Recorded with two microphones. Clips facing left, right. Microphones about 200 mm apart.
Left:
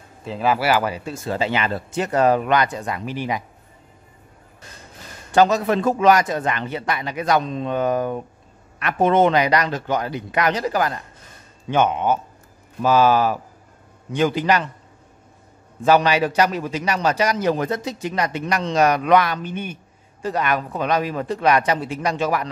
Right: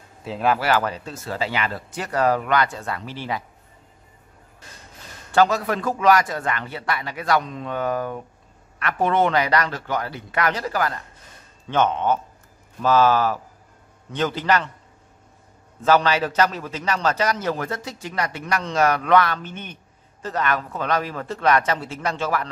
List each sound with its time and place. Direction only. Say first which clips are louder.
0.2 s a man's voice: left 1 dB; centre (ahead or behind); by 3.4 s 15° left (ahead or behind)
5.3 s a man's voice: left 3 dB; 20° left (ahead or behind)
15.8 s a man's voice: left 2 dB; 15° left (ahead or behind)